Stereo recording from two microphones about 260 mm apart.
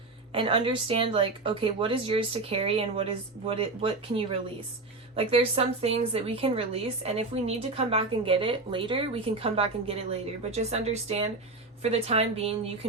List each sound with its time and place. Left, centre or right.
0.3 s a woman's voice: right